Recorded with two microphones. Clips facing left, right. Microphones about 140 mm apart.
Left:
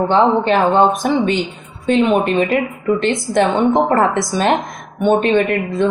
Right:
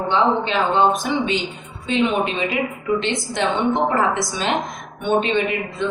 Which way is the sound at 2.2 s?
50° left (ahead or behind).